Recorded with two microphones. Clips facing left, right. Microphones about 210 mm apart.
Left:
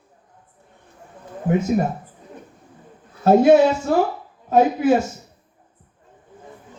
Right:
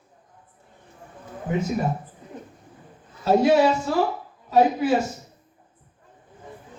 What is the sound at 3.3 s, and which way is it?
Speech, 50° left (ahead or behind).